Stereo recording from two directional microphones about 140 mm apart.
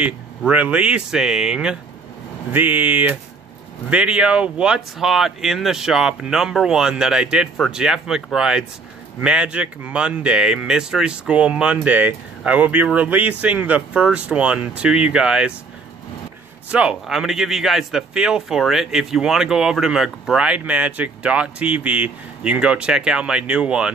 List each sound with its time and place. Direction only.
0.5 s a man's voice: 10° right (ahead or behind)
16.7 s a man's voice: 5° right (ahead or behind)